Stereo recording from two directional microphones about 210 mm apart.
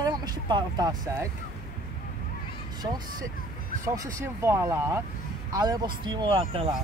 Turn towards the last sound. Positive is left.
turn(degrees=-25)  # may be behind; listen again after turning